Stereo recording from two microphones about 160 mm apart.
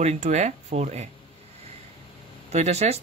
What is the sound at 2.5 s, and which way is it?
Speech, 40° right (ahead or behind).